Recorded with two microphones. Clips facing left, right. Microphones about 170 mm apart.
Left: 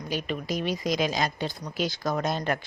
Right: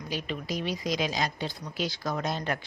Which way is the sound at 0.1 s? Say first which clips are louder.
Left 3 dB; 50° left (ahead or behind).